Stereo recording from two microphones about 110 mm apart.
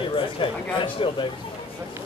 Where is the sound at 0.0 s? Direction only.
50° left (ahead or behind).